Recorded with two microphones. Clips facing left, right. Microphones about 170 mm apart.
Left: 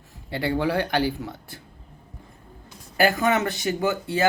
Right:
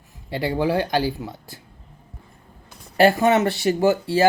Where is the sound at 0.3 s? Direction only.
20° right (ahead or behind).